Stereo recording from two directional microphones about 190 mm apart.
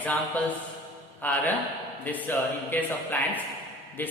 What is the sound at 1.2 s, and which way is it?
A man's voice, 10° left (ahead or behind).